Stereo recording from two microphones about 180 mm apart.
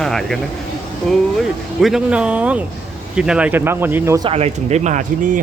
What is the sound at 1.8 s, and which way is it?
Speech, 5° right (ahead or behind).